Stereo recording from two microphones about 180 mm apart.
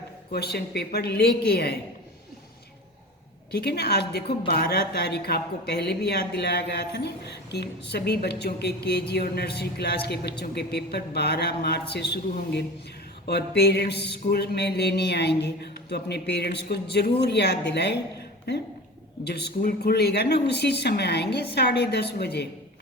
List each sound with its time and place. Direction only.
0.3 s a woman's voice: 60° left (ahead or behind)
3.5 s a woman's voice: 65° left (ahead or behind)
13.2 s a sound: 65° left (ahead or behind)
19.2 s a woman's voice: 65° left (ahead or behind)